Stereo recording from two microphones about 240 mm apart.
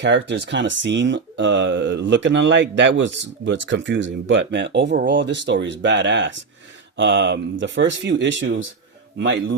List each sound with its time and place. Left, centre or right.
0.0 s speech: right